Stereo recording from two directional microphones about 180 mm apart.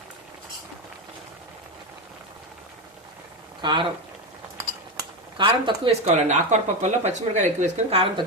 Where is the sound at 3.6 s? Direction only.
25° right (ahead or behind).